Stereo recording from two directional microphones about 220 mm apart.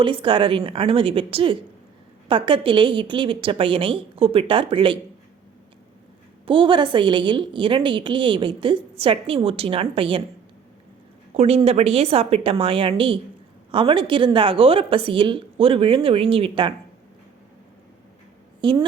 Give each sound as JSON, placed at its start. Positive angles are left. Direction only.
{"t": 0.0, "sound": "a woman's voice", "side_deg": -25}
{"t": 6.4, "sound": "a woman's voice", "side_deg": -20}
{"t": 11.3, "sound": "a woman's voice", "side_deg": -30}
{"t": 18.6, "sound": "a woman's voice", "side_deg": -20}